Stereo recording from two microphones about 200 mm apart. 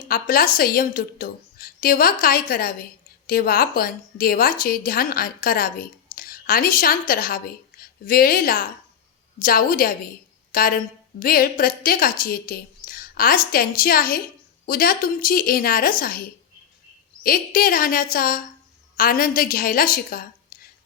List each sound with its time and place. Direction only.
0.1 s a woman's voice: 45° left (ahead or behind)
6.1 s a sound: 45° left (ahead or behind)
7.1 s a woman's voice: 45° left (ahead or behind)
17.2 s a woman's voice: 45° left (ahead or behind)